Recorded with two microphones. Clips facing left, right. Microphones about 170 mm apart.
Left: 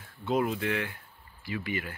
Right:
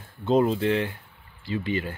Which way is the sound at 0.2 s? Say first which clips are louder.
Right 7 dB; 30° right (ahead or behind).